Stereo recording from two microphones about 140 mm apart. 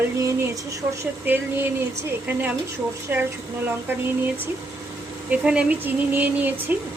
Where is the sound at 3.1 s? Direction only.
15° right (ahead or behind).